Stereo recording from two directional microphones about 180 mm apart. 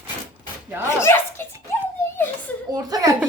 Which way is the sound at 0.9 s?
15° left (ahead or behind).